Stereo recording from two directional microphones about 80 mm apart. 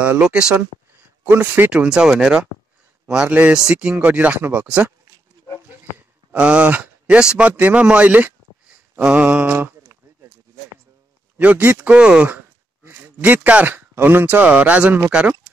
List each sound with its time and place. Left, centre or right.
0.2 s a man's voice: centre
6.3 s a man's voice: centre
11.3 s a man's voice: centre